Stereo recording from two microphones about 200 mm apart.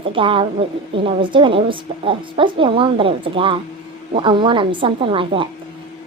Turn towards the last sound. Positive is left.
turn(degrees=-25)  # may be behind; listen again after turning